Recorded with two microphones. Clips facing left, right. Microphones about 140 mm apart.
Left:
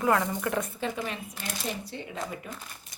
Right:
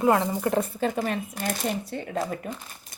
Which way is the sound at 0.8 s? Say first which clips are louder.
Right 6 dB; 45° right (ahead or behind).